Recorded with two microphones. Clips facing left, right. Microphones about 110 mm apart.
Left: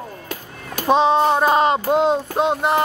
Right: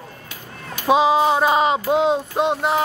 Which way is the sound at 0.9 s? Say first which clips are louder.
Even; 5° right (ahead or behind).